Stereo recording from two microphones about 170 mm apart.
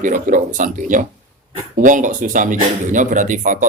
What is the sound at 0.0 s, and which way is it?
A man's voice, 50° right (ahead or behind).